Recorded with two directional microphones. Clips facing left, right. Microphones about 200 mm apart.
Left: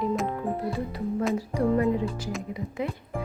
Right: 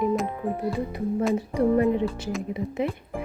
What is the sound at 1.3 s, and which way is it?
A woman's voice, 20° right (ahead or behind).